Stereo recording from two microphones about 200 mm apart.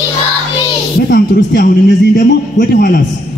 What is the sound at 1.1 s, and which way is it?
A man's voice, 50° left (ahead or behind).